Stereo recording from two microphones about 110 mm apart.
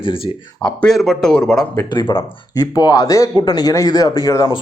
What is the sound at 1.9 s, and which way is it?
Speech, 45° left (ahead or behind).